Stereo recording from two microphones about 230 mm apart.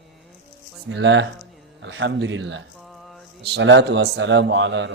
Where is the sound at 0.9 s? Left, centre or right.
Right.